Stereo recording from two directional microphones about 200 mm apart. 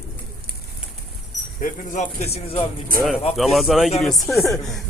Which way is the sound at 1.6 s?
40° left (ahead or behind).